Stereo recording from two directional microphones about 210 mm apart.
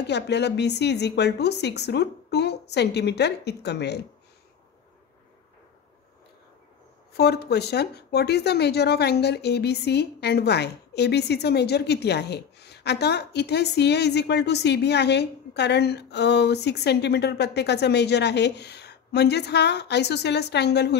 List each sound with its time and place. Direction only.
0.0 s speech: 55° left (ahead or behind)
7.2 s speech: 50° left (ahead or behind)